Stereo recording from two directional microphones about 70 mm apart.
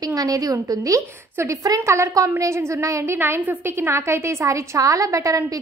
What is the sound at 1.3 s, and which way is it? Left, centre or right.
A woman's voice, right.